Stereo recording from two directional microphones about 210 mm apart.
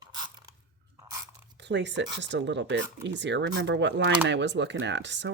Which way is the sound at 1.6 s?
55° right (ahead or behind).